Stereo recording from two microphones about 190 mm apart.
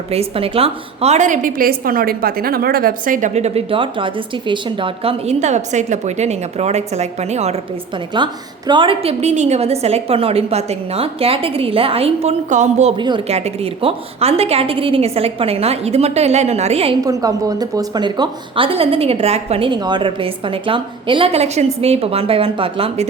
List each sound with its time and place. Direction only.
0.1 s a woman's voice: 30° right (ahead or behind)
8.1 s a woman's voice: 25° right (ahead or behind); by 12.9 s 40° right (ahead or behind)
13.0 s a woman's voice: 25° right (ahead or behind)
17.0 s a woman's voice: 20° right (ahead or behind)